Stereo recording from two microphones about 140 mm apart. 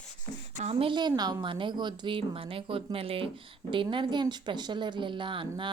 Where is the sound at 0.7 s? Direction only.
40° right (ahead or behind).